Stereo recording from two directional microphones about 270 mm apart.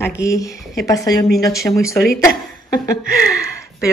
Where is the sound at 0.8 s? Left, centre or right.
Centre.